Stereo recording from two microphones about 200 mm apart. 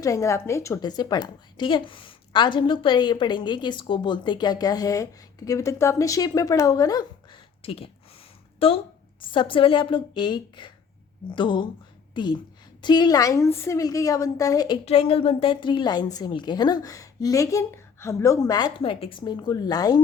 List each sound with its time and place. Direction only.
0.0 s a woman's voice: 15° left (ahead or behind)
7.6 s a woman's voice: 30° left (ahead or behind)
14.8 s a woman's voice: 30° left (ahead or behind)